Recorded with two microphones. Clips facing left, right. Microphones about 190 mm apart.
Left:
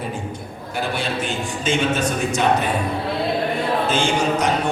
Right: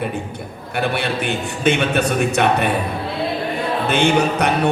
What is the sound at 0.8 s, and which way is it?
Mantra, 65° right (ahead or behind).